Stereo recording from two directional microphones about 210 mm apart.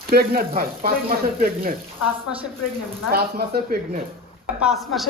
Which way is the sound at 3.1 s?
50° right (ahead or behind).